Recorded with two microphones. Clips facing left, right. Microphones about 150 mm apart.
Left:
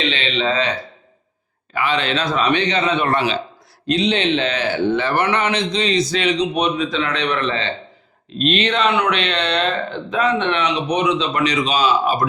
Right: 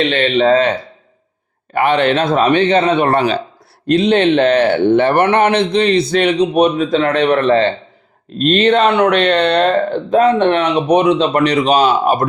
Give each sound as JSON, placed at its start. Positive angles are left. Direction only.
{"t": 0.0, "sound": "a man's voice", "side_deg": -50}
{"t": 3.8, "sound": "speech", "side_deg": -55}